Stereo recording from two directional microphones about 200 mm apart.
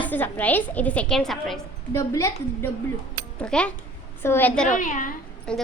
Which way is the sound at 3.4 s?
5° left (ahead or behind).